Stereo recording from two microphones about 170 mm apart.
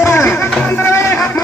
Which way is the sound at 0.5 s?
10° left (ahead or behind).